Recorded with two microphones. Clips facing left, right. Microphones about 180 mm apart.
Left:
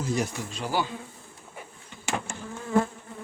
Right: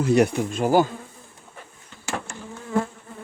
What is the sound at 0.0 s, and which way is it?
Speech, 65° right (ahead or behind).